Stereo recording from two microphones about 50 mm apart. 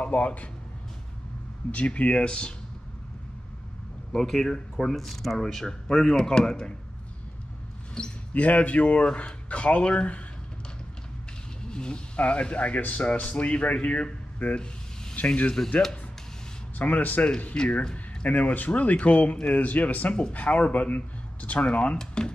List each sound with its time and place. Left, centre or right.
0.0 s speech: left
1.7 s speech: left
4.1 s speech: centre
8.0 s speech: centre
8.3 s speech: left
11.6 s speech: centre
15.2 s speech: left
15.6 s speech: left
16.7 s speech: left
21.9 s speech: centre